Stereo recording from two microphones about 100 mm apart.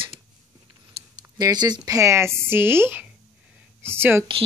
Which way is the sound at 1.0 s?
90° right.